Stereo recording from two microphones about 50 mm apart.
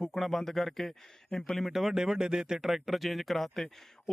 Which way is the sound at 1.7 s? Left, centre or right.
Centre.